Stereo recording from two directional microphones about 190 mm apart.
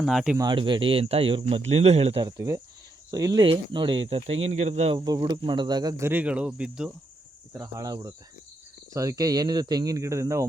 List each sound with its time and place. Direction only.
0.0 s speech: centre (ahead or behind)
0.3 s speech: 25° right (ahead or behind)
4.9 s speech: 20° right (ahead or behind); by 6.9 s 5° right (ahead or behind)
7.5 s speech: 15° right (ahead or behind)